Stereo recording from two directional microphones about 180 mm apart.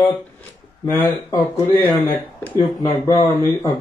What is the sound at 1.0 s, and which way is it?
A man's voice, 15° left (ahead or behind).